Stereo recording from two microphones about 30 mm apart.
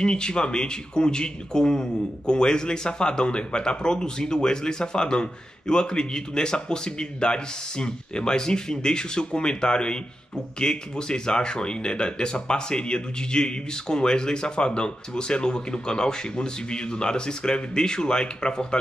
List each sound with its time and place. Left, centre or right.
0.0 s speech: left